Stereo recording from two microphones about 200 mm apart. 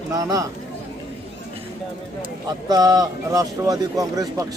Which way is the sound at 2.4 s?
20° right (ahead or behind).